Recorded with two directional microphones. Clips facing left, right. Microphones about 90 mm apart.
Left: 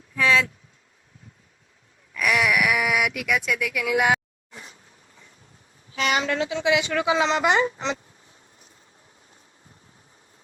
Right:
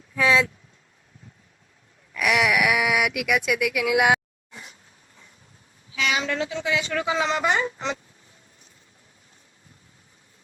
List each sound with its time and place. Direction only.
0.2 s a sound: 25° right (ahead or behind)
2.1 s wail: 10° right (ahead or behind)
3.2 s speech: 10° right (ahead or behind)
5.9 s a sound: 45° left (ahead or behind); by 6.8 s 65° left (ahead or behind)
6.8 s a man's voice: 15° left (ahead or behind)
7.3 s speech: 25° left (ahead or behind)